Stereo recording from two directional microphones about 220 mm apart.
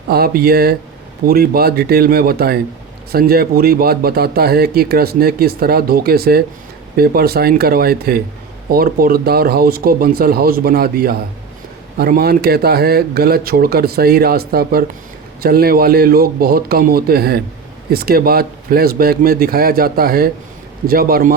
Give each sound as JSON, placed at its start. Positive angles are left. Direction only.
{"t": 0.1, "sound": "a man's voice", "side_deg": -45}